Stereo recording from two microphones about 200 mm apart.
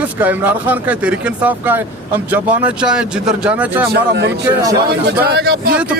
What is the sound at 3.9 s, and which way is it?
A man's voice, 55° right (ahead or behind).